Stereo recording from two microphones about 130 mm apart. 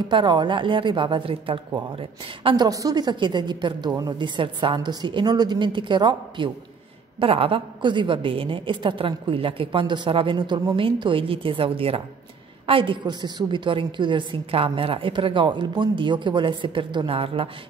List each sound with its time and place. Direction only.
0.1 s a woman's voice: 35° right (ahead or behind)